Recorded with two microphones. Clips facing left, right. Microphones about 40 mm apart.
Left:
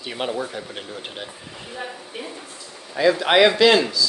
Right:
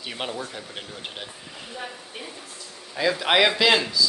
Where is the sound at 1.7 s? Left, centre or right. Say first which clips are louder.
Left 4 dB; centre.